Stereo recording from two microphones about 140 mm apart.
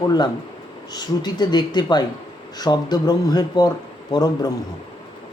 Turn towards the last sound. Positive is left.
turn(degrees=30)  # may be behind; listen again after turning